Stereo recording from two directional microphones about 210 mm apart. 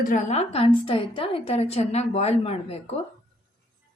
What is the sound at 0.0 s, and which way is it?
A woman's voice, 35° left (ahead or behind).